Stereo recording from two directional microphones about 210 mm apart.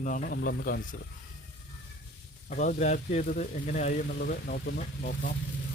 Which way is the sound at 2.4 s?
40° left (ahead or behind).